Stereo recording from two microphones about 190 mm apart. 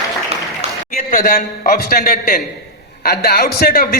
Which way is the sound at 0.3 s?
35° right (ahead or behind).